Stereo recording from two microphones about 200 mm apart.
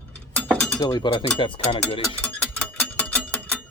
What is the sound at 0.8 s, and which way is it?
Speech, 20° left (ahead or behind).